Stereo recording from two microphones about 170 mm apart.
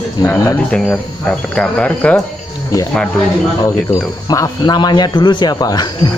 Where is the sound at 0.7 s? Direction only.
5° left (ahead or behind).